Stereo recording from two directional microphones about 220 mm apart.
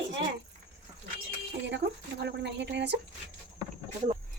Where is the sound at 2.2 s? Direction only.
50° right (ahead or behind).